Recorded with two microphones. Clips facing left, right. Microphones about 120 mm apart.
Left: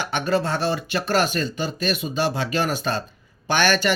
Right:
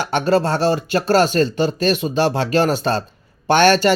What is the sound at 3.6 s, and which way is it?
Speech, 50° right (ahead or behind).